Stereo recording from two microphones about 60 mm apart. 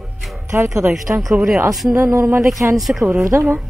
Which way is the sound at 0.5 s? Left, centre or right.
Right.